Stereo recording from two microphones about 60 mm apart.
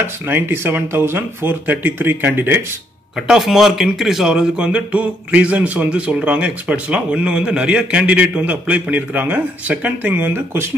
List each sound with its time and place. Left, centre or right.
0.0 s speech: right
3.2 s speech: centre; by 10.7 s right